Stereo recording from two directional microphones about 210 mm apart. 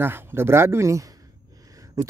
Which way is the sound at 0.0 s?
10° right (ahead or behind).